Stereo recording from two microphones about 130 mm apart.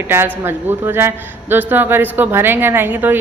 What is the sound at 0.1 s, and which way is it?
A man's voice, 15° right (ahead or behind).